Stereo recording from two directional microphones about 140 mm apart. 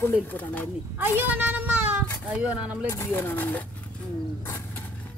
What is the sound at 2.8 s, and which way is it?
Speech, 15° left (ahead or behind).